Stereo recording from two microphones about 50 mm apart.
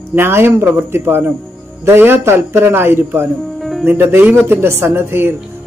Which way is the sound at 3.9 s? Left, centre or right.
Right.